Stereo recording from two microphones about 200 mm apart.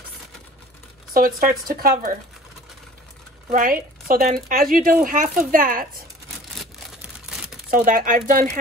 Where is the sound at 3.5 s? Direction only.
45° right (ahead or behind).